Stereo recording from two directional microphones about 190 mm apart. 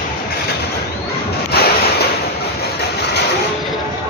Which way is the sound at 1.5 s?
55° left (ahead or behind).